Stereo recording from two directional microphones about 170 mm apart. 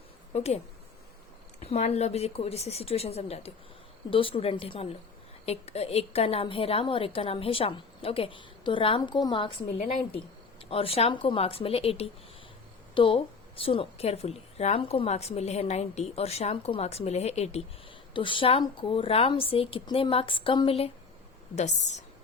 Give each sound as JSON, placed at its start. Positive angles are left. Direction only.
{"t": 0.3, "sound": "a woman's voice", "side_deg": 40}
{"t": 1.6, "sound": "a woman's voice", "side_deg": 40}